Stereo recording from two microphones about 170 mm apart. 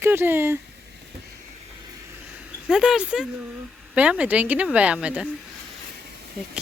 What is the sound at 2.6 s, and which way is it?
Speech, 5° right (ahead or behind).